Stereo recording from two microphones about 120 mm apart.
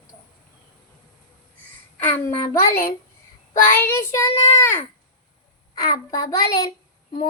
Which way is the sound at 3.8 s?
25° left (ahead or behind).